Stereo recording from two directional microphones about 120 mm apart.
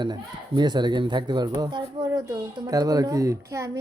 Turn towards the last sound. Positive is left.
turn(degrees=-25)  # may be behind; listen again after turning